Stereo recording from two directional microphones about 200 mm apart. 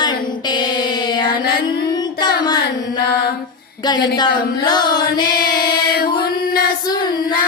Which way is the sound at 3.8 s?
20° left (ahead or behind).